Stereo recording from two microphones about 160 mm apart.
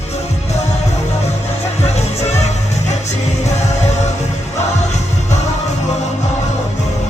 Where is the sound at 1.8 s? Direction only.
45° left (ahead or behind).